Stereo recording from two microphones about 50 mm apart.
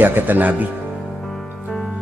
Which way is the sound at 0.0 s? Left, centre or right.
Right.